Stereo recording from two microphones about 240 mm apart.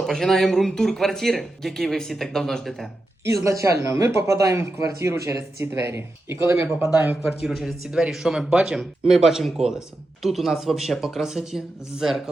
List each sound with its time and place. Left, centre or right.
0.0 s speech: centre
3.2 s speech: centre